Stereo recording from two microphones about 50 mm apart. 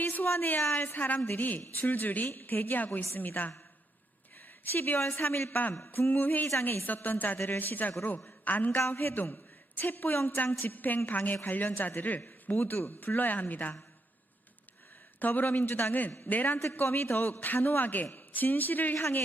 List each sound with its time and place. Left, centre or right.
0.0 s a sound: left
0.8 s speech: left
4.7 s a woman's voice: left
12.5 s speech: left
15.2 s speech: left